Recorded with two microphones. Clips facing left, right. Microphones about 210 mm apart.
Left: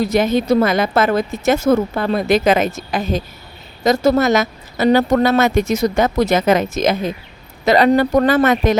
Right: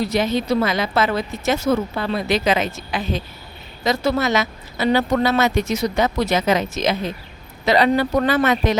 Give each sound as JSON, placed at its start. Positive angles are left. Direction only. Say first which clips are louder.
{"t": 0.0, "sound": "speech", "louder": "left 4 dB", "side_deg": 50}